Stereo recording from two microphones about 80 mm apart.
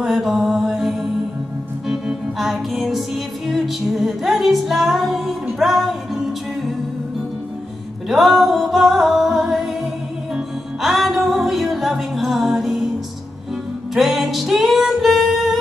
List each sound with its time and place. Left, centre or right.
0.0 s mantra: centre
1.9 s organ: centre
3.4 s music: centre
8.1 s music: centre
13.9 s music: centre